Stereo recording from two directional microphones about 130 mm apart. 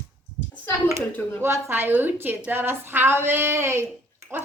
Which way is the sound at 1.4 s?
20° right (ahead or behind).